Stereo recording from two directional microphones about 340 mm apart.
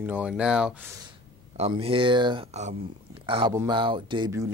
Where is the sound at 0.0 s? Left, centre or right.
Centre.